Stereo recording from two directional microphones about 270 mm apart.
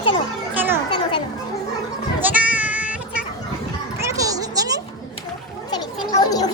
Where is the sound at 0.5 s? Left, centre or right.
Centre.